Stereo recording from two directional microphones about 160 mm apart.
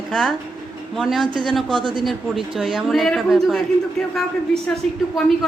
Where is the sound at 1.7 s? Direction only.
30° right (ahead or behind).